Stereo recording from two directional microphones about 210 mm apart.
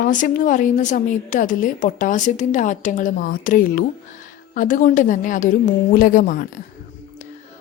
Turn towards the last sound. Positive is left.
turn(degrees=40)  # may be behind; listen again after turning